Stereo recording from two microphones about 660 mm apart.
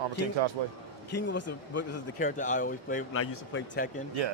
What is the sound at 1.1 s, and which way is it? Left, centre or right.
Speech, centre.